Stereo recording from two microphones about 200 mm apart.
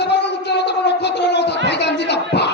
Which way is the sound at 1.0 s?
60° left (ahead or behind).